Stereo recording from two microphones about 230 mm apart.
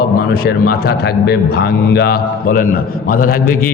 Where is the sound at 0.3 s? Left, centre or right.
Left.